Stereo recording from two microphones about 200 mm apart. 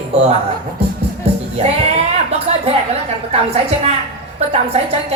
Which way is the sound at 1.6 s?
30° right (ahead or behind).